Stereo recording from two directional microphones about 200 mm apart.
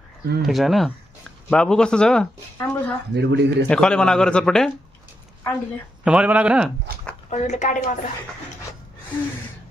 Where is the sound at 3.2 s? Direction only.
60° right (ahead or behind).